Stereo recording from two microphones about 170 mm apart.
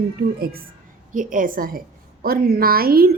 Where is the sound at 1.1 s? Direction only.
50° right (ahead or behind).